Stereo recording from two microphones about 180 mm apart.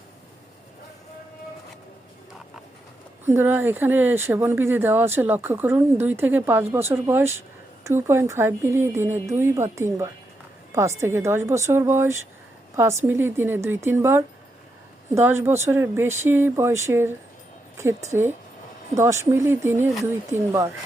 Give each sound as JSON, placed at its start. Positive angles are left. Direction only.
{"t": 3.2, "sound": "speech", "side_deg": -10}